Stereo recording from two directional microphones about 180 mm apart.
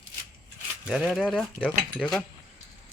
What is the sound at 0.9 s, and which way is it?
Cutlery, 5° right (ahead or behind).